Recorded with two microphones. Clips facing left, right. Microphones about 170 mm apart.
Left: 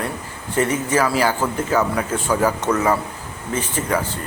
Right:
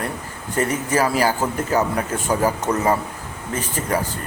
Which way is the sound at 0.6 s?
40° right (ahead or behind).